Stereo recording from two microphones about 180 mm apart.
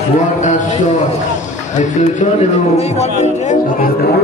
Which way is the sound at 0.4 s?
45° left (ahead or behind).